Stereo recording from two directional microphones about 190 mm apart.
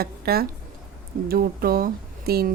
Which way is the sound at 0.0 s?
55° right (ahead or behind).